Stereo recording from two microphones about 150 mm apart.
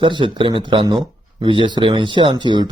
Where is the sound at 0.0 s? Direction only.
30° right (ahead or behind).